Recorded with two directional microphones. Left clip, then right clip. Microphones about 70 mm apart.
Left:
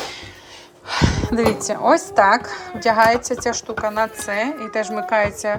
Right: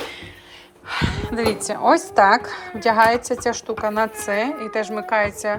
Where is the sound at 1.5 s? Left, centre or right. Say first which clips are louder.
Left 1 dB; left.